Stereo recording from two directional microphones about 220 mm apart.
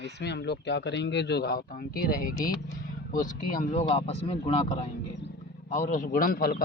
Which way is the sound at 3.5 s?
30° left (ahead or behind).